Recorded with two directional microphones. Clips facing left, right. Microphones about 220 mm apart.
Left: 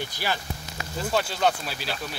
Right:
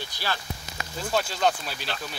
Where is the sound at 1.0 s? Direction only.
5° left (ahead or behind).